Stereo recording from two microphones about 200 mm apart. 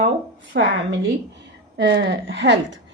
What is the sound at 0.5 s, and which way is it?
Speech, 60° right (ahead or behind).